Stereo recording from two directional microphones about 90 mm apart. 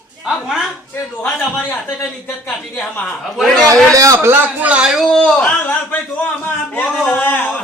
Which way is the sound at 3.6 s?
40° right (ahead or behind).